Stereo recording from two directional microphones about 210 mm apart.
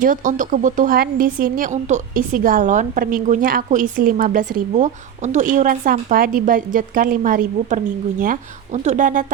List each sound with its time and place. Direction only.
0.0 s a woman's voice: 40° right (ahead or behind)